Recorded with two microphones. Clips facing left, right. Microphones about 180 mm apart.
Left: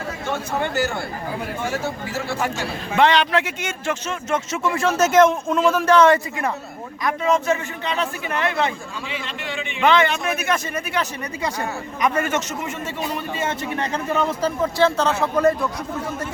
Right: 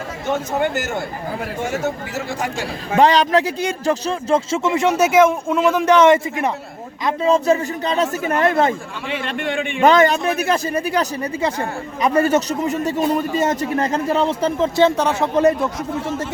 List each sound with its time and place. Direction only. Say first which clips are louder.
0.3 s speech: right 2 dB; 45° right (ahead or behind)
2.9 s a man's voice: right 4 dB; 40° right (ahead or behind)
14.2 s speech: right 1 dB; 25° right (ahead or behind)